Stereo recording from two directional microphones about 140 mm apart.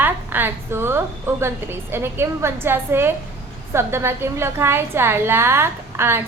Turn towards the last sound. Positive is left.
turn(degrees=-15)  # may be behind; listen again after turning